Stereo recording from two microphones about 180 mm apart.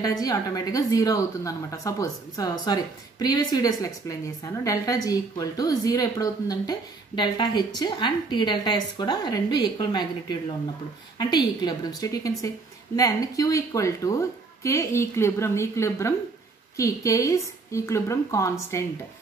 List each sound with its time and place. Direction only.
0.0 s speech: 20° left (ahead or behind)
11.1 s a woman's voice: 20° left (ahead or behind)